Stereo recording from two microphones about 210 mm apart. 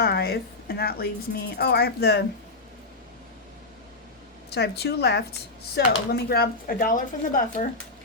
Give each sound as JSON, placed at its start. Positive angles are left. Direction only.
{"t": 0.0, "sound": "a woman's voice", "side_deg": 50}
{"t": 4.4, "sound": "speech", "side_deg": 50}